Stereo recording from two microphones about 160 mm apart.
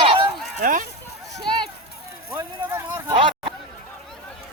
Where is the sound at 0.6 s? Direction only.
55° right (ahead or behind).